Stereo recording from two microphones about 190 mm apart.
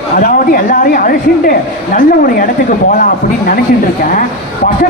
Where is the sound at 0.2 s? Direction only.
50° left (ahead or behind).